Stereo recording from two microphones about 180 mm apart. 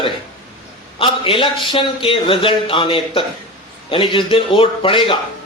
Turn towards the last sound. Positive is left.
turn(degrees=30)  # may be behind; listen again after turning